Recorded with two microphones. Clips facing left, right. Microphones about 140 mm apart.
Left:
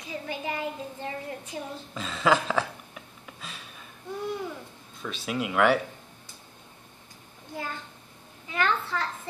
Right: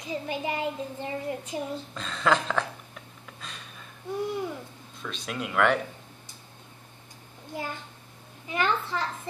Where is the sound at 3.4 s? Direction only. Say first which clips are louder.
Even; 5° left (ahead or behind).